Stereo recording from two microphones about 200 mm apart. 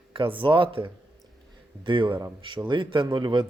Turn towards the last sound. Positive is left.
turn(degrees=-25)  # may be behind; listen again after turning